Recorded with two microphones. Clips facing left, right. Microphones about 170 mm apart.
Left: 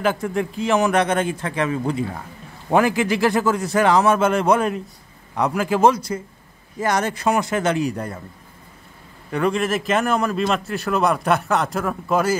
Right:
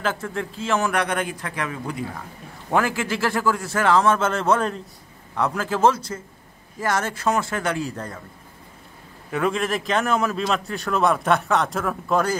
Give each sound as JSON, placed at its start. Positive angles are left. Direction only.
{"t": 0.0, "sound": "a man's voice", "side_deg": 15}
{"t": 9.3, "sound": "a man's voice", "side_deg": 0}